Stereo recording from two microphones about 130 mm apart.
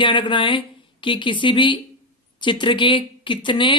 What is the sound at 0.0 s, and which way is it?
Speech, 40° left (ahead or behind).